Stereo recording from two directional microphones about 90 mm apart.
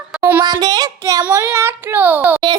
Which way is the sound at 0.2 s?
20° right (ahead or behind).